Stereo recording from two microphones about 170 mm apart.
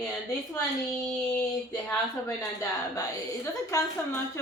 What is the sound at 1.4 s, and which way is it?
Child singing, 10° left (ahead or behind).